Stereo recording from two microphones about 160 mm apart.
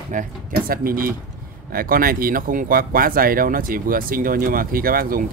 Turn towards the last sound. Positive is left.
turn(degrees=-65)  # may be behind; listen again after turning